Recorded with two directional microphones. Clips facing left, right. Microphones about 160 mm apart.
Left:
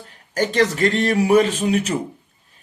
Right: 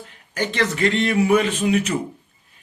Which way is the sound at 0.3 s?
40° left (ahead or behind).